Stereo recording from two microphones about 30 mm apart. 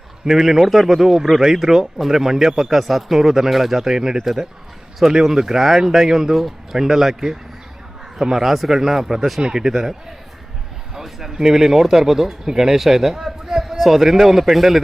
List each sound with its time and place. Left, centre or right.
0.3 s a man's voice: centre
4.2 s speech: centre
5.1 s a man's voice: centre
8.4 s a man's voice: centre